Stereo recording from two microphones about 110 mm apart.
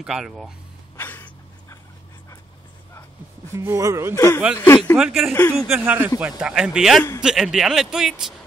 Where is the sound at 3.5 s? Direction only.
25° right (ahead or behind).